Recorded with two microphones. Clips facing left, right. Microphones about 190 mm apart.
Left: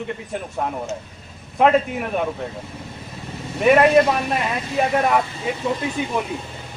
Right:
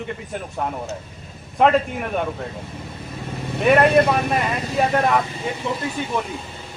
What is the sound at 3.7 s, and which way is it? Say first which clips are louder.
Speech: left 1 dB; centre (ahead or behind).